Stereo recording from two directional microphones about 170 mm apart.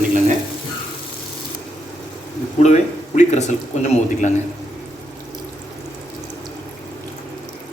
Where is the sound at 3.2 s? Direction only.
45° left (ahead or behind).